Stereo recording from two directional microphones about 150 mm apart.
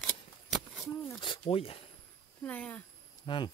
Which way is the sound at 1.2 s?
35° left (ahead or behind).